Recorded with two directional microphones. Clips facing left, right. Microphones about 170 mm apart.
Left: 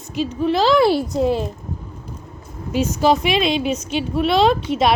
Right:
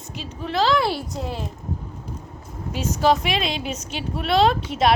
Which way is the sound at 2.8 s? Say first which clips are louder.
Left 3 dB; centre (ahead or behind).